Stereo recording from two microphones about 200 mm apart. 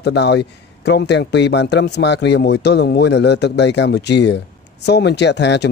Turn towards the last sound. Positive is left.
turn(degrees=60)  # may be behind; listen again after turning